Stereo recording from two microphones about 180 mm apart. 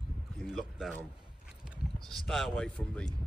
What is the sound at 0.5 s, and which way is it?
Speech, centre (ahead or behind).